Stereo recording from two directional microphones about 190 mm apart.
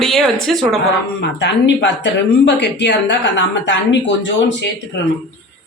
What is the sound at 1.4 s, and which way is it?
A woman's voice, 65° left (ahead or behind).